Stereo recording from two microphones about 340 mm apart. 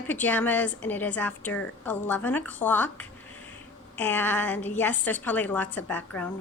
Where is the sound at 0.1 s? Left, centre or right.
Centre.